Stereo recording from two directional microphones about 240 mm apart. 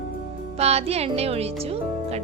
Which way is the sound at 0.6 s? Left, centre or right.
Right.